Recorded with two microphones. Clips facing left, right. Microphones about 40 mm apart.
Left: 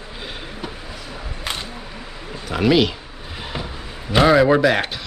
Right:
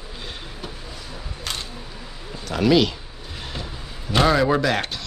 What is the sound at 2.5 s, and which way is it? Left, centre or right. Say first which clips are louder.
Speech: left 1 dB; centre.